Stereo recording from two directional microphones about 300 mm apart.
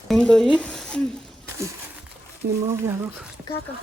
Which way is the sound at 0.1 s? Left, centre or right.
Centre.